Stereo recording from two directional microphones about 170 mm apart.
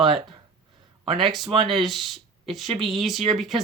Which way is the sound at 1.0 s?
30° right (ahead or behind).